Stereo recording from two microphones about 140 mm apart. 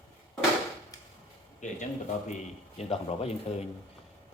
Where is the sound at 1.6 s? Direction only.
60° left (ahead or behind).